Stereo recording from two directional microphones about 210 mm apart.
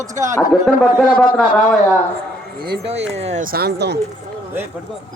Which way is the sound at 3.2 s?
35° right (ahead or behind).